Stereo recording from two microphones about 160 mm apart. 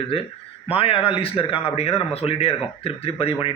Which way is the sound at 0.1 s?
35° left (ahead or behind).